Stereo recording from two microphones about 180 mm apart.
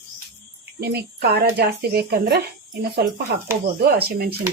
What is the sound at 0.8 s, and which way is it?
Speech, 60° right (ahead or behind).